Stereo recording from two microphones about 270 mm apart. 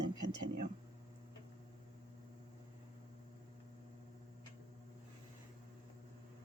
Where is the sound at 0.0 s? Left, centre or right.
Right.